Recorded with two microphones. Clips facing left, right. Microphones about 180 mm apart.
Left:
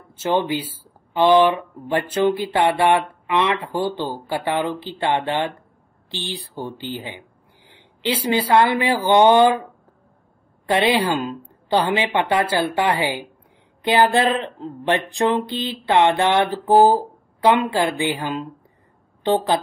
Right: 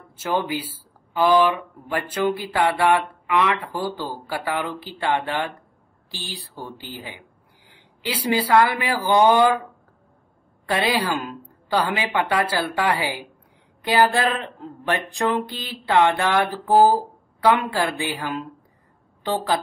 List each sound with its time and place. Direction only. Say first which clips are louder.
0.2 s speech: left 4 dB; 25° left (ahead or behind)
10.7 s speech: left 4 dB; 25° left (ahead or behind)